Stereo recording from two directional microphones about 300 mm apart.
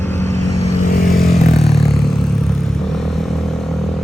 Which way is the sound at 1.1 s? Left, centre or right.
Centre.